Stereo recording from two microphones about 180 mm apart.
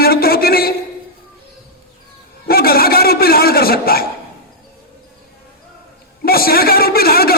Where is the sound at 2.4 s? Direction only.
60° left (ahead or behind).